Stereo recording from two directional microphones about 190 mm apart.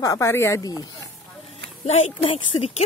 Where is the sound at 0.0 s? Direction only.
15° left (ahead or behind).